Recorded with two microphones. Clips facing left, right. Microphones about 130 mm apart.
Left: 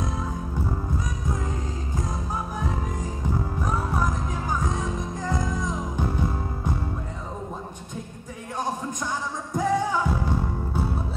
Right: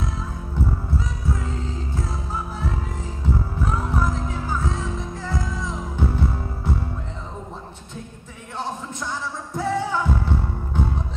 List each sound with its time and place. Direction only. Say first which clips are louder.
3.6 s music: right 2 dB; 15° left (ahead or behind)
9.5 s music: left 1 dB; 15° left (ahead or behind)